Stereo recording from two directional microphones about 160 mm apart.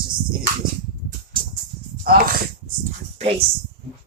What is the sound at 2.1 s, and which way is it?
Speech, 65° right (ahead or behind).